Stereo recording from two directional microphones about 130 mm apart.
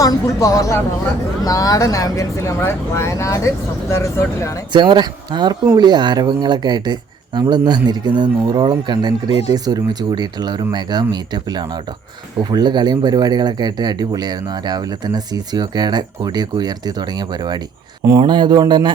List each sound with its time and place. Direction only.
0.0 s speech: 25° left (ahead or behind)
4.7 s speech: 35° right (ahead or behind)